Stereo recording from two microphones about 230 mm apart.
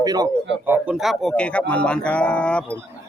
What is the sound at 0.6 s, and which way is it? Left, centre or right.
Speech, centre.